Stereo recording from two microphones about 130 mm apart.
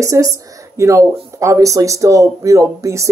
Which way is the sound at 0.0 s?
25° right (ahead or behind).